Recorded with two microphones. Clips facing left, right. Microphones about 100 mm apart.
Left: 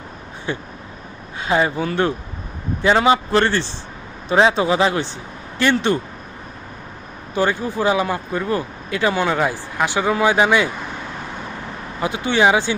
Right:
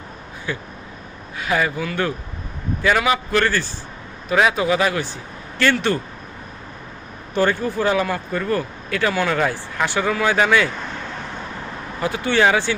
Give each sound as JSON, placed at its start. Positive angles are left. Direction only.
{"t": 0.5, "sound": "a man's voice", "side_deg": 25}
{"t": 7.3, "sound": "speech", "side_deg": 15}
{"t": 11.9, "sound": "speech", "side_deg": 20}